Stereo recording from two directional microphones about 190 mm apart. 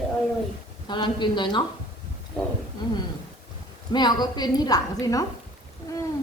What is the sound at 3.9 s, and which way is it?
A woman's voice, 20° left (ahead or behind).